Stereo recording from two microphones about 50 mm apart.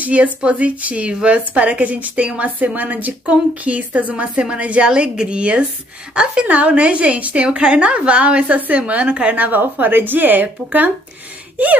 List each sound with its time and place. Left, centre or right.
0.0 s a woman's voice: right